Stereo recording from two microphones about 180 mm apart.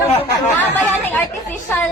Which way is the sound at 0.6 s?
10° left (ahead or behind).